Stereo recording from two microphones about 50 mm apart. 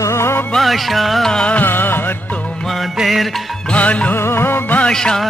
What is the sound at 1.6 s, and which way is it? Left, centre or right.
Music, left.